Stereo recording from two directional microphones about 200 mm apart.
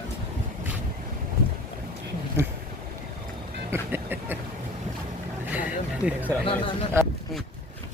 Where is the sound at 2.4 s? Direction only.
15° right (ahead or behind).